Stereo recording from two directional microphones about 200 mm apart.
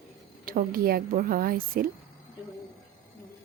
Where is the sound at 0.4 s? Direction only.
45° right (ahead or behind).